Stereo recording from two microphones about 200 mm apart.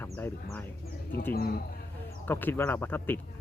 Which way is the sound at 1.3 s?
50° left (ahead or behind).